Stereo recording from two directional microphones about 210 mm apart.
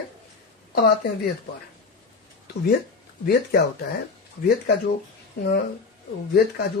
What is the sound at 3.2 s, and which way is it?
Speech, 45° left (ahead or behind).